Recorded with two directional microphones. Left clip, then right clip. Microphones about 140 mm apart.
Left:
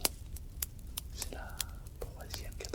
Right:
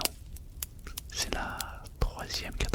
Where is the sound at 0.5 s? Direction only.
Centre (ahead or behind).